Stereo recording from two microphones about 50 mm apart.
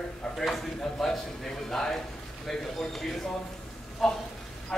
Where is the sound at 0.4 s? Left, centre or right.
Centre.